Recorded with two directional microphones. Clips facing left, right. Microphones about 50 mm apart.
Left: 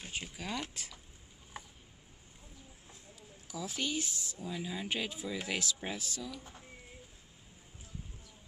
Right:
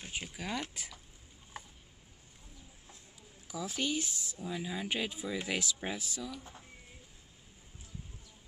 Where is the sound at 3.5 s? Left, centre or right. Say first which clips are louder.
Right 2 dB; right.